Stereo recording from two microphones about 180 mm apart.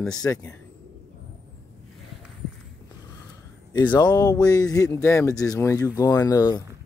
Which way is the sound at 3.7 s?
25° left (ahead or behind).